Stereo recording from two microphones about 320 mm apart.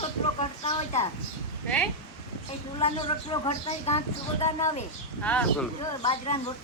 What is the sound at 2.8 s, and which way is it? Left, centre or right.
A woman's voice, centre.